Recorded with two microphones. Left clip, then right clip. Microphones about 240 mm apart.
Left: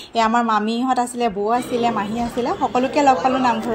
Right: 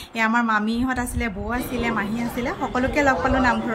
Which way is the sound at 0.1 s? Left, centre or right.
Centre.